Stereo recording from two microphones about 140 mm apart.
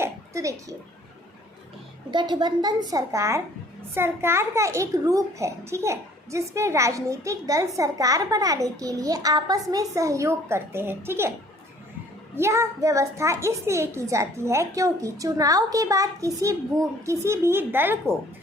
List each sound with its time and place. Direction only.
0.0 s a sound: 20° right (ahead or behind)
2.0 s a child's voice: 35° right (ahead or behind); by 11.3 s 15° right (ahead or behind)
12.4 s a child's voice: 20° right (ahead or behind)